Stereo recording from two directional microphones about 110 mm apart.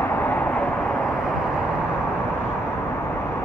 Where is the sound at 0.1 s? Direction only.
15° left (ahead or behind).